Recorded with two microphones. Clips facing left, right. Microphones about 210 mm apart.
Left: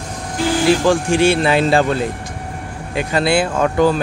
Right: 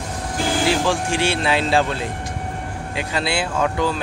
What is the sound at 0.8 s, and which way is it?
Speech, 50° left (ahead or behind).